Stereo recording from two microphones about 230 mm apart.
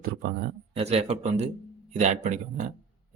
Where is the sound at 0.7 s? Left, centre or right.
Right.